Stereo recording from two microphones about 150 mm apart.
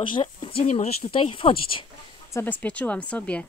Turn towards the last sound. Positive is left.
turn(degrees=10)  # may be behind; listen again after turning